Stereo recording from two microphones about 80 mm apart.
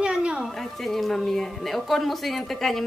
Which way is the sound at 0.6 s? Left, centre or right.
Centre.